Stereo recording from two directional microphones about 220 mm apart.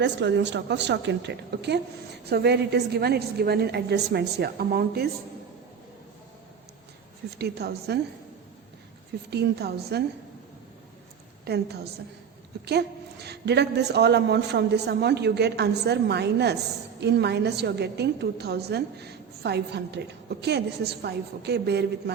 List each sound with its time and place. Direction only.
0.0 s a woman's voice: 50° right (ahead or behind)
7.3 s a woman's voice: 45° right (ahead or behind)
9.3 s a woman's voice: 45° right (ahead or behind)
11.4 s a woman's voice: 50° right (ahead or behind)